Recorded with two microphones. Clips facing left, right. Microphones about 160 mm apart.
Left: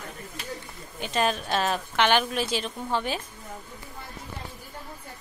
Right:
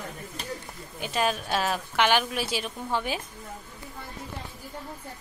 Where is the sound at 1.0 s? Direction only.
5° right (ahead or behind).